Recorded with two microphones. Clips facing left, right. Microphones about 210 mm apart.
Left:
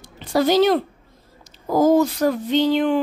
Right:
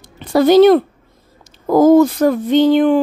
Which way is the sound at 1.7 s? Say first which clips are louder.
Right 7 dB; 55° right (ahead or behind).